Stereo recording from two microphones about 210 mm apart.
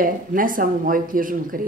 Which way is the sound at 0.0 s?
40° right (ahead or behind).